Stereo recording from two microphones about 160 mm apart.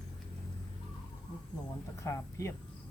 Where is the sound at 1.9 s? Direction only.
20° left (ahead or behind).